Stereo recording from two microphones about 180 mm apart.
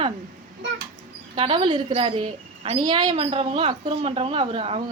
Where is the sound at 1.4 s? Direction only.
30° right (ahead or behind).